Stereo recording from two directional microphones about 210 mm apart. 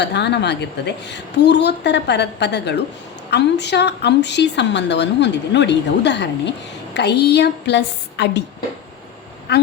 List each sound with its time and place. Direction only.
0.0 s a woman's voice: 55° left (ahead or behind)
9.5 s a woman's voice: 50° left (ahead or behind)